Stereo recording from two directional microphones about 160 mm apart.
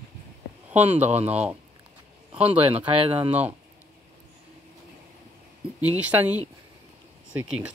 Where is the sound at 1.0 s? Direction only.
10° right (ahead or behind).